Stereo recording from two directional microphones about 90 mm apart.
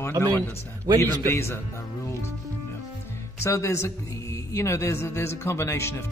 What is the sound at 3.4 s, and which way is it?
A man's voice, 35° left (ahead or behind).